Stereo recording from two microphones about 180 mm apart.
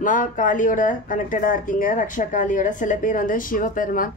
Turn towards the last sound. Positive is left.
turn(degrees=50)  # may be behind; listen again after turning